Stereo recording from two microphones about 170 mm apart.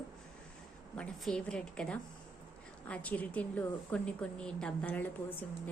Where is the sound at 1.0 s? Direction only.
5° left (ahead or behind).